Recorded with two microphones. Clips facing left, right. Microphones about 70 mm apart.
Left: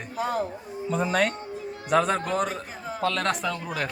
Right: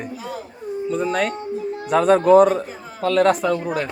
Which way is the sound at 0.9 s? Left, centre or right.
Centre.